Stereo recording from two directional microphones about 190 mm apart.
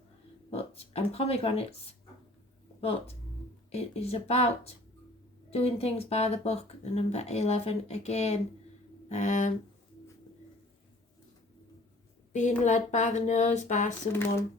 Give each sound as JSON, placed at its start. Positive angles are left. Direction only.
{"t": 0.5, "sound": "speech", "side_deg": 30}
{"t": 3.7, "sound": "speech", "side_deg": 35}
{"t": 12.3, "sound": "speech", "side_deg": 40}